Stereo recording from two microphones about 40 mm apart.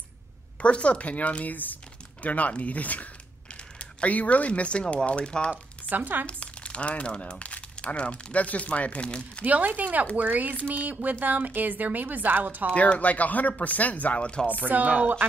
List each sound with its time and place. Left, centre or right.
0.6 s speech: left
5.2 s speech: left
5.9 s a woman's voice: right
6.2 s speech: left
9.4 s a woman's voice: right
12.7 s speech: left
14.1 s speech: left
14.7 s a woman's voice: right